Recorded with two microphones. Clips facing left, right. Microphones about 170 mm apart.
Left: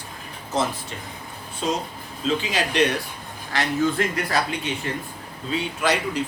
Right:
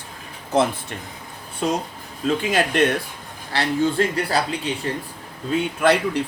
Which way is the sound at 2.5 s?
50° right (ahead or behind).